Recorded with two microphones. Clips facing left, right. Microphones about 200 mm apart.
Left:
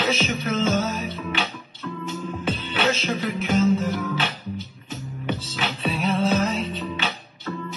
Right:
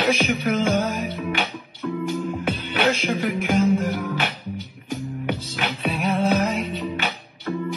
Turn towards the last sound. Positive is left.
turn(degrees=-15)  # may be behind; listen again after turning